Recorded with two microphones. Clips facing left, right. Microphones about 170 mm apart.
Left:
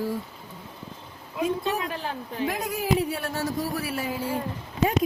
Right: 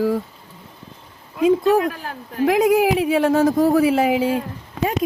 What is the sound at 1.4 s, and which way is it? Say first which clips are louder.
Speech: right 11 dB; 90° right.